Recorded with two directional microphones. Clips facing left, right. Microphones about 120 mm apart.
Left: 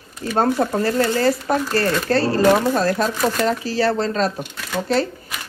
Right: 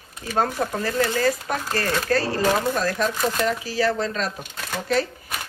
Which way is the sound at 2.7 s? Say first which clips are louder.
Left 4 dB; 35° left (ahead or behind).